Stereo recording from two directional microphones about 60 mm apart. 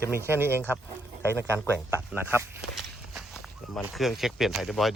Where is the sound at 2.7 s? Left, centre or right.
Centre.